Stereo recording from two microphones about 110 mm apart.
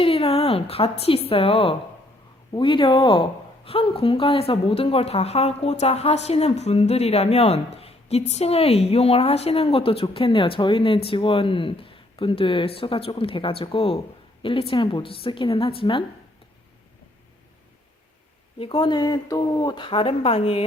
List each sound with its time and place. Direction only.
0.0 s a woman's voice: 65° left (ahead or behind)
2.5 s speech: 50° left (ahead or behind)
18.6 s speech: 50° left (ahead or behind)